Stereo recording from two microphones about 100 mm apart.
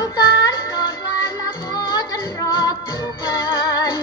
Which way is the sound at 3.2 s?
40° left (ahead or behind).